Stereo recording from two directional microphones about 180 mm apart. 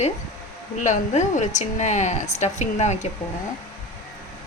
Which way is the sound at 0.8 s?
40° left (ahead or behind).